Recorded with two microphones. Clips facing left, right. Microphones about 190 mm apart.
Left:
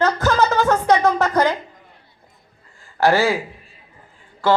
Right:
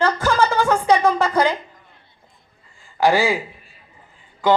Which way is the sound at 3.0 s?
15° right (ahead or behind).